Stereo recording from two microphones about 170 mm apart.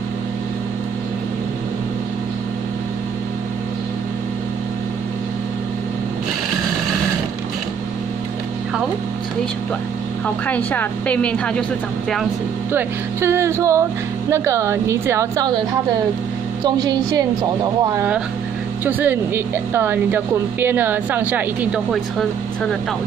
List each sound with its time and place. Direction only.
10.2 s a woman's voice: 10° left (ahead or behind)
12.7 s a woman's voice: 15° right (ahead or behind)
16.6 s a woman's voice: 25° right (ahead or behind)
17.9 s a woman's voice: 10° right (ahead or behind)